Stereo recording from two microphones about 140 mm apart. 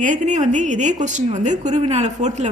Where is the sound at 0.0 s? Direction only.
65° right (ahead or behind).